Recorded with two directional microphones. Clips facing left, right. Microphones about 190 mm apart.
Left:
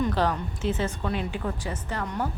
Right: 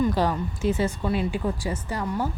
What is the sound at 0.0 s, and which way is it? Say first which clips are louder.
Speech: right 2 dB; 10° right (ahead or behind).